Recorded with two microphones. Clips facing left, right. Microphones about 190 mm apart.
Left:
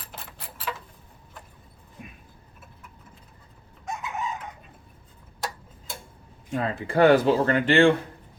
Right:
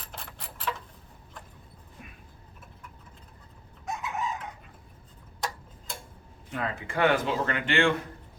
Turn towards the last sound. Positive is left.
turn(degrees=35)  # may be behind; listen again after turning